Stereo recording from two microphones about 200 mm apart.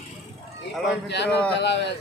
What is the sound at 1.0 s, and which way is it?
Speech, 60° left (ahead or behind).